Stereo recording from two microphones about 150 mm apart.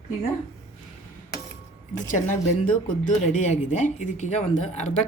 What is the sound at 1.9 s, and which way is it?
Speech, 55° left (ahead or behind).